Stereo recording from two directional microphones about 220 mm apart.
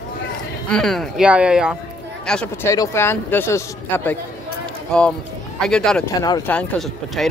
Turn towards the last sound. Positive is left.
turn(degrees=0)  # may be behind; listen again after turning